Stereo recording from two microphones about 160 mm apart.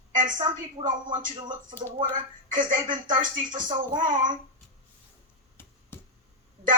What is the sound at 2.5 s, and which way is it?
Speech, 55° right (ahead or behind).